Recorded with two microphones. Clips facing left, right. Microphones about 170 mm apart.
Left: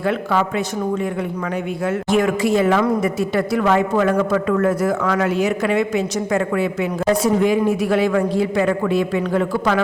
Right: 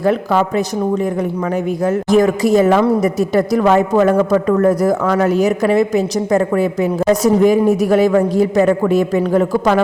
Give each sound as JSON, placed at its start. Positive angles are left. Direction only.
{"t": 0.0, "sound": "a woman's voice", "side_deg": -40}